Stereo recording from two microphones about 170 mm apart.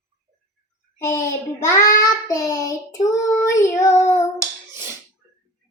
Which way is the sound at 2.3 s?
20° left (ahead or behind).